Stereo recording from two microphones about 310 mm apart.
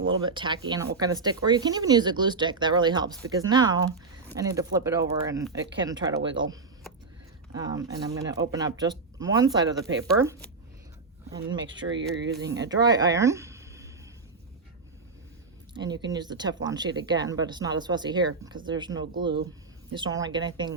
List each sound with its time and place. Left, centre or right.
0.1 s speech: centre
11.9 s speech: right
12.5 s speech: centre
15.7 s speech: centre